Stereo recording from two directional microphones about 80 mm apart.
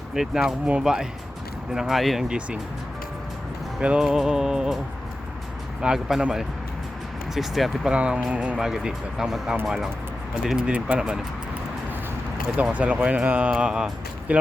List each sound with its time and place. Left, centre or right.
0.1 s speech: centre
2.2 s speech: centre
3.8 s speech: centre
5.8 s speech: centre
7.9 s speech: centre
12.5 s speech: centre